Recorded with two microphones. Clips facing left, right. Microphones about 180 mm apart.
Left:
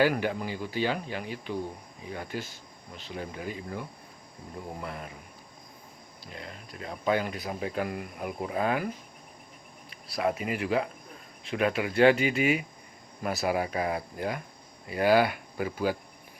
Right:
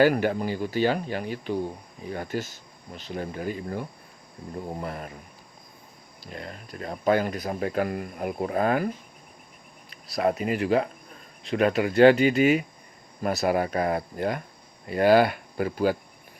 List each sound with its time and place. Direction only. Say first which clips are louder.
0.0 s speech: right 5 dB; 50° right (ahead or behind)
4.8 s speech: right 4 dB; 45° right (ahead or behind)
6.3 s speech: right 5 dB; 50° right (ahead or behind)
10.2 s speech: right 4 dB; 40° right (ahead or behind)